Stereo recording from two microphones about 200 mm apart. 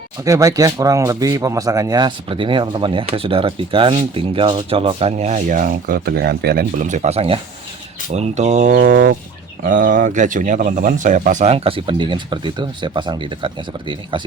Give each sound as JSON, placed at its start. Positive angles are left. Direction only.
{"t": 0.3, "sound": "speech", "side_deg": -15}
{"t": 6.7, "sound": "speech", "side_deg": -35}